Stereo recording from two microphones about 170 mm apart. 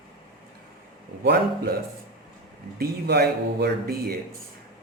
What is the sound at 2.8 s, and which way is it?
A man's voice, 70° right (ahead or behind).